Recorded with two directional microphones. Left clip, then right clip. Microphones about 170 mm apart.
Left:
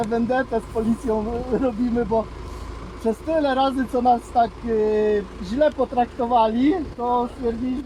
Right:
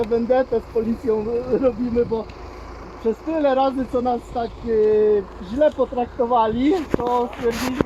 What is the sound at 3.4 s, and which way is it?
Speech, 65° left (ahead or behind).